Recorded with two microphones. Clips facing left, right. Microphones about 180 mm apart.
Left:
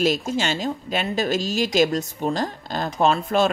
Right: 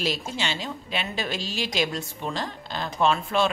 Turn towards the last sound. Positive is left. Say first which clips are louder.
# left 4 dB
turn(degrees=40)  # may be behind; listen again after turning